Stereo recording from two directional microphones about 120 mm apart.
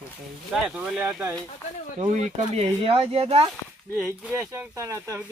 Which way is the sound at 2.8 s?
55° right (ahead or behind).